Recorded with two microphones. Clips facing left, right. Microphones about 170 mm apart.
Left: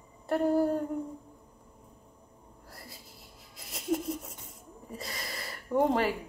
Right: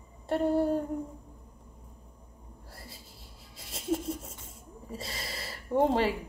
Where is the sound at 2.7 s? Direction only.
30° right (ahead or behind).